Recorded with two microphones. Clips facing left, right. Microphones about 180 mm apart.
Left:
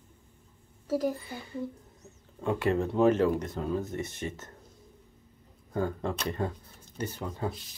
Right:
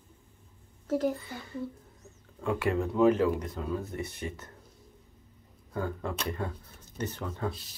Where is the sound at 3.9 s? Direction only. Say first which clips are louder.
Left 2 dB; 25° left (ahead or behind).